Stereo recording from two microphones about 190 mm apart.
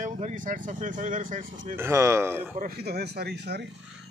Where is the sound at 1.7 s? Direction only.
15° right (ahead or behind).